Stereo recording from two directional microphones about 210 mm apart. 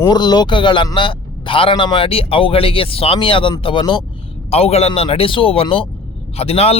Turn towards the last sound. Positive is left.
turn(degrees=30)  # may be behind; listen again after turning